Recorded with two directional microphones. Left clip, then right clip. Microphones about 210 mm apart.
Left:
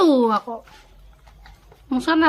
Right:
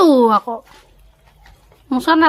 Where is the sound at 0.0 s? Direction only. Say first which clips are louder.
Right 5 dB; 20° right (ahead or behind).